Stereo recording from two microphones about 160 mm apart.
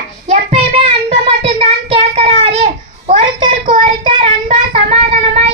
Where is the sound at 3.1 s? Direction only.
35° right (ahead or behind).